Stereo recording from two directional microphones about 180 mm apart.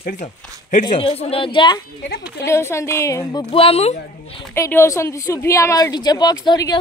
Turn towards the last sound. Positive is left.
turn(degrees=20)  # may be behind; listen again after turning